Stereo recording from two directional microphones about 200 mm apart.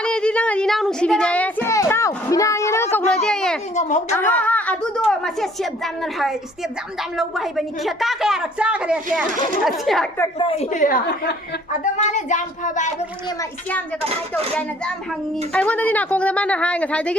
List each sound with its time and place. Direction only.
0.0 s child singing: 5° left (ahead or behind)
3.2 s a sound: 5° left (ahead or behind)
3.8 s a woman's voice: 35° left (ahead or behind)
4.1 s a woman's voice: 10° left (ahead or behind)
10.2 s a woman's voice: 25° left (ahead or behind)
10.7 s a woman's voice: 40° left (ahead or behind)
11.9 s a woman's voice: 35° left (ahead or behind)
15.5 s a woman's voice: 5° left (ahead or behind)